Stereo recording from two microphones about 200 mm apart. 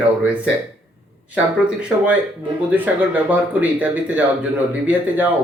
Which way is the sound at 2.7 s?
10° right (ahead or behind).